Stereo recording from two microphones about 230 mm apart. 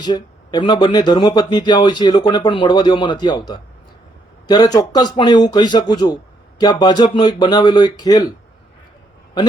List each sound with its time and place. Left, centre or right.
0.0 s speech: centre